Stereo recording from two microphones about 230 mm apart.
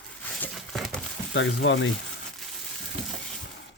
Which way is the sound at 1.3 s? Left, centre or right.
Left.